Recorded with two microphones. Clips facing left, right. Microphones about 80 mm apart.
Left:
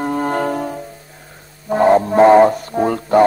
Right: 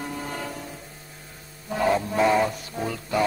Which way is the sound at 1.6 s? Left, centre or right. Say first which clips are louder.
Left 11 dB; left.